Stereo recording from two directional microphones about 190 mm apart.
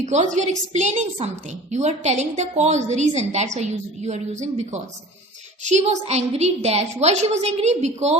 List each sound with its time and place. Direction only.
0.0 s a woman's voice: 40° right (ahead or behind)